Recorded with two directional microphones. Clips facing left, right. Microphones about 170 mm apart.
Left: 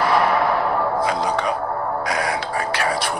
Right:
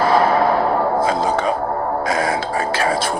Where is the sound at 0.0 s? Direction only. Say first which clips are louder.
Right 3 dB; 30° right (ahead or behind).